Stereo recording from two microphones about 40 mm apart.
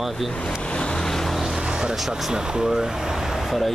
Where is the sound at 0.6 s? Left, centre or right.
Left.